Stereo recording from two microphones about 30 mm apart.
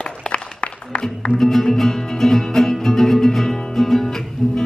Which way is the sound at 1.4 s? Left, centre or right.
Centre.